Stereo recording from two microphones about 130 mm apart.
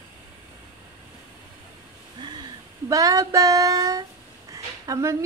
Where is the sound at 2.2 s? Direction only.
35° right (ahead or behind).